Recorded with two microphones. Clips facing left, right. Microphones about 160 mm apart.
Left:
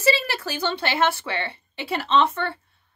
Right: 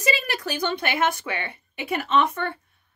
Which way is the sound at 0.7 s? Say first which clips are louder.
Left 3 dB; 30° left (ahead or behind).